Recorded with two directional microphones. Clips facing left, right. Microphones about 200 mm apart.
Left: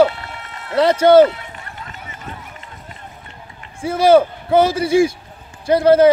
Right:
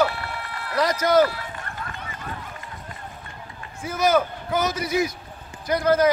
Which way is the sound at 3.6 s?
30° left (ahead or behind).